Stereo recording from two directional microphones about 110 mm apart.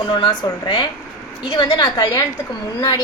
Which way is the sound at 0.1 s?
45° left (ahead or behind).